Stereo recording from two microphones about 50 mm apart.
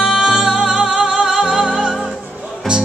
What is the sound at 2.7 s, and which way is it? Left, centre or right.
Music, centre.